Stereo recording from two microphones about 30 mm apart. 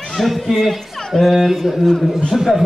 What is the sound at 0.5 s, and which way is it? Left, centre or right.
Speech, centre.